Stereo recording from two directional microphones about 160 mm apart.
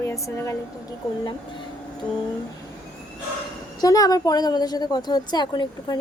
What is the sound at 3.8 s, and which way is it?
A woman's voice, 25° left (ahead or behind).